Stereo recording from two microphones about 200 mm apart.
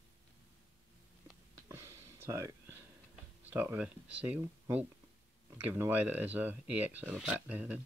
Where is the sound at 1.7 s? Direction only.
15° right (ahead or behind).